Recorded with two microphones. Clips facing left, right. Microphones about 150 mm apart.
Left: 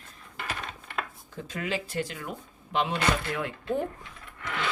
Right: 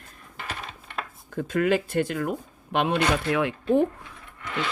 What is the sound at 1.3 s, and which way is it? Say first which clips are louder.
Speech: right 10 dB; 55° right (ahead or behind).